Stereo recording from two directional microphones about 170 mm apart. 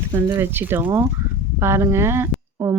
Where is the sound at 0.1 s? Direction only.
10° right (ahead or behind).